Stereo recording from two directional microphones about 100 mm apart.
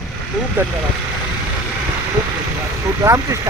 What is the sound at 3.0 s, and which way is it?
Speech, 30° right (ahead or behind).